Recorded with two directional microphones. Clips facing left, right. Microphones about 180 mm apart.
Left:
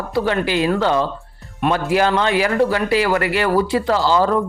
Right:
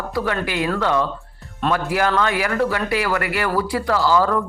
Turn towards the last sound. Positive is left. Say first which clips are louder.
# left 2 dB
turn(degrees=25)  # may be behind; listen again after turning